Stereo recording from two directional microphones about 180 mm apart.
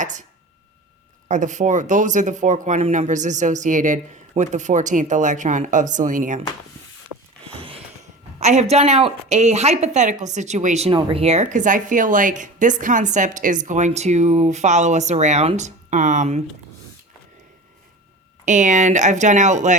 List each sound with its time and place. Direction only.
1.3 s speech: 45° right (ahead or behind)
8.4 s a woman's voice: 40° right (ahead or behind)
18.4 s a woman's voice: 45° right (ahead or behind)